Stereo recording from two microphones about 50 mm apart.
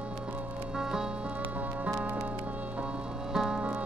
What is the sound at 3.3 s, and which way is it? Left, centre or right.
Music, centre.